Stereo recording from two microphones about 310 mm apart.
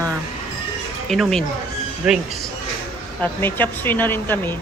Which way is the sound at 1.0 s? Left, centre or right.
Centre.